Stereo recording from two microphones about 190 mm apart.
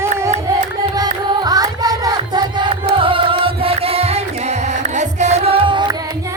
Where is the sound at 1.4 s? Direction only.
20° right (ahead or behind).